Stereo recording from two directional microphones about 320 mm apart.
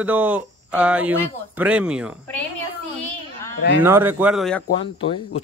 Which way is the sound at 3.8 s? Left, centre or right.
Centre.